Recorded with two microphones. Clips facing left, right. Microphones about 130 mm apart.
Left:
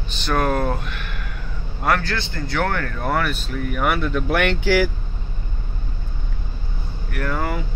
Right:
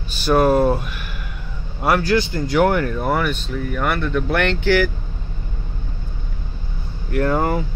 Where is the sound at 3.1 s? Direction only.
Centre (ahead or behind).